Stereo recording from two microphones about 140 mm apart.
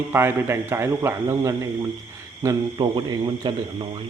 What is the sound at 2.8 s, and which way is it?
Speech, 35° right (ahead or behind).